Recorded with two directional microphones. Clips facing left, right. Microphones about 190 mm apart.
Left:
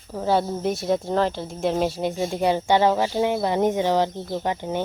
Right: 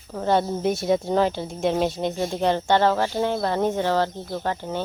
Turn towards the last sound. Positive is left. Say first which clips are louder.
# left 2 dB
turn(degrees=15)  # may be behind; listen again after turning